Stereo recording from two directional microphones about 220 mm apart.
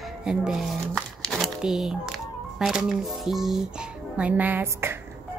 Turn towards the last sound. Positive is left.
turn(degrees=-10)  # may be behind; listen again after turning